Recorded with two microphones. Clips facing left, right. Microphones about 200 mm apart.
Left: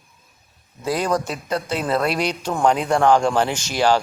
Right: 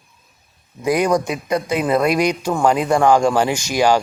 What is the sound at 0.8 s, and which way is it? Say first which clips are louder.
Speech: right 5 dB; 15° right (ahead or behind).